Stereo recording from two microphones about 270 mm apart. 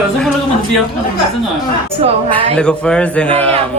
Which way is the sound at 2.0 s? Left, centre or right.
Right.